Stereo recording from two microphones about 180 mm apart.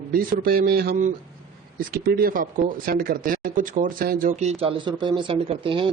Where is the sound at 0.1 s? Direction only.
55° right (ahead or behind).